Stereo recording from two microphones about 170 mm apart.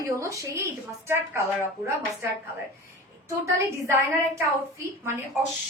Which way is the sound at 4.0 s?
15° right (ahead or behind).